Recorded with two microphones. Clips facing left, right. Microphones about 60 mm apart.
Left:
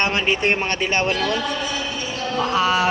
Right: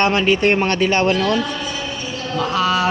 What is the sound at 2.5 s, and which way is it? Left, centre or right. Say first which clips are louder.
Speech: right 1 dB; centre.